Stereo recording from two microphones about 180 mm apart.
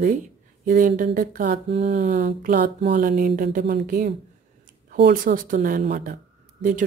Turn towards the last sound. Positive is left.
turn(degrees=-50)  # may be behind; listen again after turning